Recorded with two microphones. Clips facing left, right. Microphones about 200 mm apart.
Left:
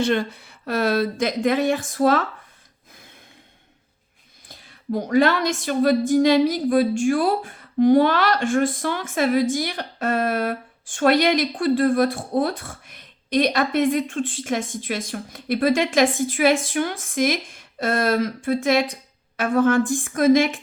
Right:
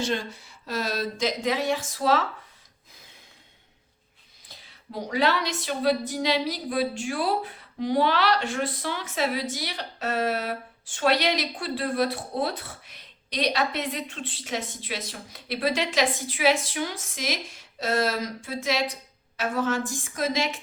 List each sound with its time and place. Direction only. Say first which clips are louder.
0.0 s speech: left 7 dB; 60° left (ahead or behind)
4.4 s speech: left 16 dB; 50° left (ahead or behind)